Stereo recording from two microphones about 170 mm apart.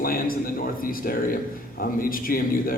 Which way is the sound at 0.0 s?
55° left (ahead or behind).